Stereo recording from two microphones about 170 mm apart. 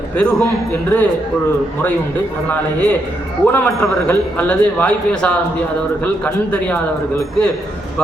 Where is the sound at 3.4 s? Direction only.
10° left (ahead or behind).